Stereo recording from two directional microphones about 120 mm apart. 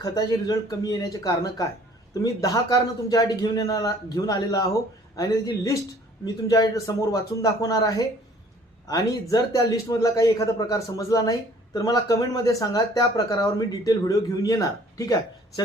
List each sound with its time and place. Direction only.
0.0 s a man's voice: 30° left (ahead or behind)